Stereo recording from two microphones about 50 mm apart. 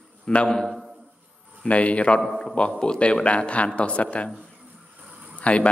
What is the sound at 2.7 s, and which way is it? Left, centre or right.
Speech, centre.